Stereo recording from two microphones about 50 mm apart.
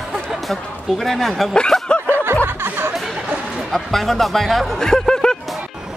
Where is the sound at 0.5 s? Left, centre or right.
Centre.